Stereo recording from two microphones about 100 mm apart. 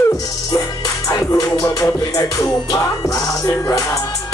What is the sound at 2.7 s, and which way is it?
Music, 35° left (ahead or behind).